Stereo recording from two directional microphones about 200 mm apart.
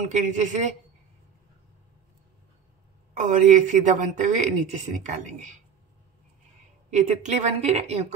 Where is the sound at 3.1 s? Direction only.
35° right (ahead or behind).